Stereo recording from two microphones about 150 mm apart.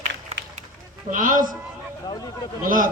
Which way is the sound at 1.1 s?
60° right (ahead or behind).